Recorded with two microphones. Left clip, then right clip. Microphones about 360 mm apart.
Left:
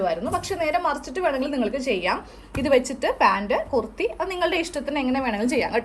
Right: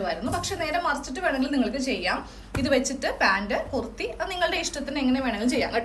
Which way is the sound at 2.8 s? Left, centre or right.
Centre.